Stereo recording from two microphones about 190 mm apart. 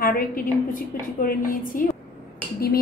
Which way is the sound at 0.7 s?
50° left (ahead or behind).